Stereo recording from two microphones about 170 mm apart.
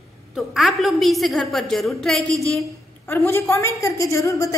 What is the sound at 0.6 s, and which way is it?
A woman's voice, centre (ahead or behind).